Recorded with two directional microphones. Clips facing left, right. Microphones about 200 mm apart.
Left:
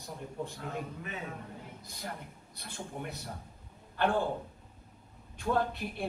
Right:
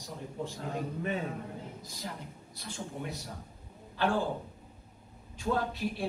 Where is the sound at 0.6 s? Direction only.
35° right (ahead or behind).